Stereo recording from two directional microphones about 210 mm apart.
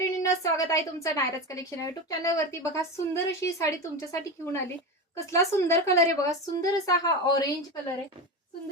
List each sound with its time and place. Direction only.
0.0 s a woman's voice: 15° left (ahead or behind)